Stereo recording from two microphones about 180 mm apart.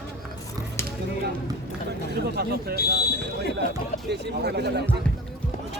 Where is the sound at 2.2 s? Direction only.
60° right (ahead or behind).